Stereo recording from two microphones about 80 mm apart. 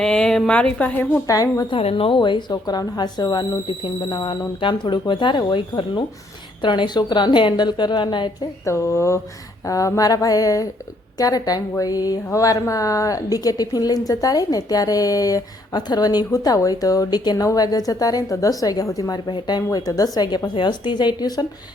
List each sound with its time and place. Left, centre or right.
0.0 s speech: centre
1.3 s a woman's voice: left
1.7 s speech: left
4.1 s a woman's voice: left
8.6 s a woman's voice: left
19.3 s speech: left
19.7 s a woman's voice: left
20.5 s speech: left